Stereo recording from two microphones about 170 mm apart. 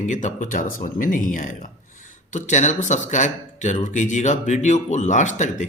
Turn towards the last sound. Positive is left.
turn(degrees=45)  # may be behind; listen again after turning